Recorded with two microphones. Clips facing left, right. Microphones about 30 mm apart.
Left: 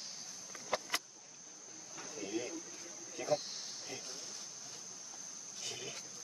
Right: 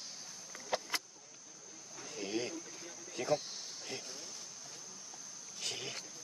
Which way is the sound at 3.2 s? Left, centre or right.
Right.